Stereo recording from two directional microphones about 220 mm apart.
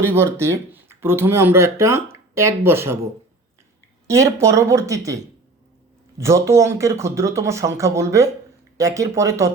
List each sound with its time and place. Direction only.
0.0 s speech: 10° right (ahead or behind)
4.0 s speech: 15° right (ahead or behind)